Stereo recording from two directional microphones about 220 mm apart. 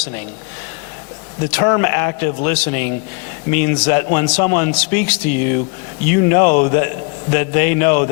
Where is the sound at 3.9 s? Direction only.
15° left (ahead or behind).